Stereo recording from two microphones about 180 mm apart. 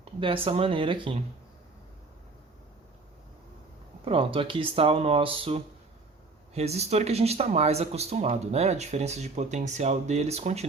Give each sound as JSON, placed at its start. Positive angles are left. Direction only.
{"t": 0.0, "sound": "speech", "side_deg": -30}
{"t": 4.0, "sound": "speech", "side_deg": -30}